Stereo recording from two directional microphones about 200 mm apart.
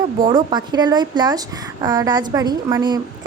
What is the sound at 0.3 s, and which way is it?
Speech, 20° right (ahead or behind).